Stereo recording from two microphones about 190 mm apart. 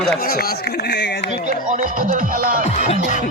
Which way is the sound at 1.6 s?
45° right (ahead or behind).